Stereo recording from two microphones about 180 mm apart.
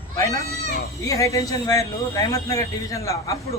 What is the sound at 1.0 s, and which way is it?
A man's voice, 20° left (ahead or behind).